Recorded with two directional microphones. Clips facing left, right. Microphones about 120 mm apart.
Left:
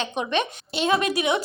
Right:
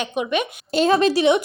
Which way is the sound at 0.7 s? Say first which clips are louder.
Right 6 dB; 35° right (ahead or behind).